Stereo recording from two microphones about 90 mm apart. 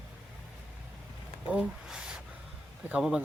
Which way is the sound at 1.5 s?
10° right (ahead or behind).